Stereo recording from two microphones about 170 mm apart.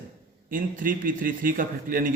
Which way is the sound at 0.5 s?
55° right (ahead or behind).